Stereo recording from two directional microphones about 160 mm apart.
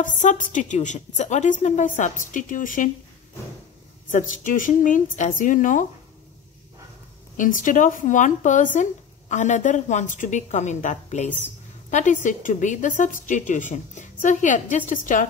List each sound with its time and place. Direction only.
0.0 s a woman's voice: 50° left (ahead or behind)
4.1 s speech: 50° left (ahead or behind)
7.3 s a woman's voice: 55° left (ahead or behind)